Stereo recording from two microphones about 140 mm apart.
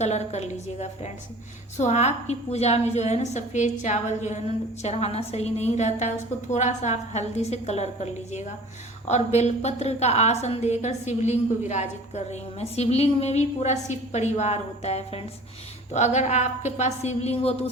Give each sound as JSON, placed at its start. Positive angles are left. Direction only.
{"t": 0.0, "sound": "a woman's voice", "side_deg": 50}